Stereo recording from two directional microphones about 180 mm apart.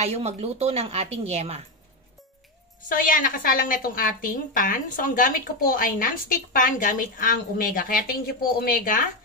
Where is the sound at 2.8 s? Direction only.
50° left (ahead or behind).